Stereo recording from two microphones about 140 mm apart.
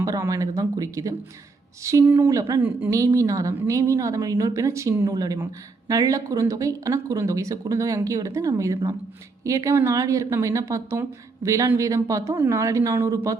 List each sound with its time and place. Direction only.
0.0 s a woman's voice: 25° right (ahead or behind)